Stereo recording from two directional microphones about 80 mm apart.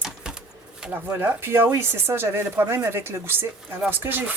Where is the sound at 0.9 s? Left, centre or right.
Right.